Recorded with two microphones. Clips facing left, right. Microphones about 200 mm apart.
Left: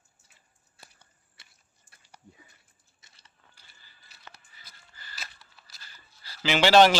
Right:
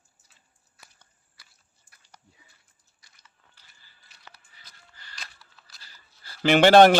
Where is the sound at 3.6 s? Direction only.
10° left (ahead or behind).